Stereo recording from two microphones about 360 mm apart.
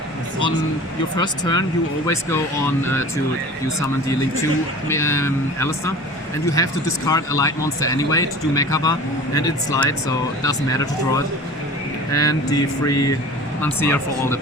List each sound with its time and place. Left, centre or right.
1.1 s speech: centre
4.9 s speech: centre